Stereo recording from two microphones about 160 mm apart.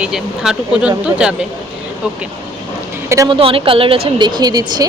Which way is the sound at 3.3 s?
35° right (ahead or behind).